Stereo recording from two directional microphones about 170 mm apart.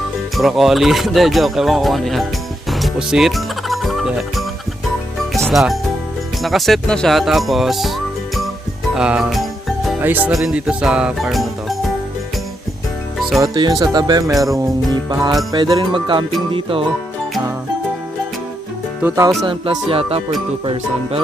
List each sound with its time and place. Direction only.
0.3 s speech: centre (ahead or behind)
2.6 s music: centre (ahead or behind)
6.4 s speech: centre (ahead or behind)
9.0 s music: 5° right (ahead or behind)
10.0 s speech: 10° right (ahead or behind)
13.4 s speech: 25° right (ahead or behind)
15.5 s speech: 25° right (ahead or behind)
16.5 s music: 30° right (ahead or behind)
19.0 s speech: 15° right (ahead or behind)
19.5 s music: 30° right (ahead or behind)